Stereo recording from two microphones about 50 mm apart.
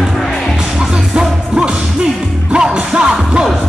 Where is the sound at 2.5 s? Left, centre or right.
Centre.